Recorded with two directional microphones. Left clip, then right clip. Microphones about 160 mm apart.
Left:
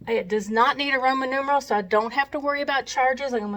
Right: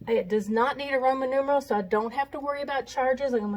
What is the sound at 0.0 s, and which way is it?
Speech, 25° left (ahead or behind).